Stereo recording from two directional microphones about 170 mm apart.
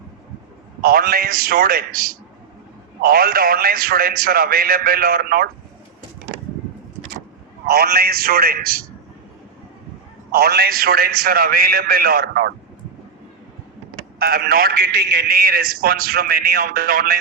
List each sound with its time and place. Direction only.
0.8 s a man's voice: 60° right (ahead or behind)
7.7 s a man's voice: 65° right (ahead or behind)
10.3 s a man's voice: 65° right (ahead or behind)
14.2 s a man's voice: 60° right (ahead or behind)